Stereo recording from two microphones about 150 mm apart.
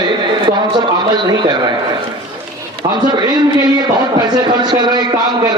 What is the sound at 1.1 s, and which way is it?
Speech, 30° right (ahead or behind).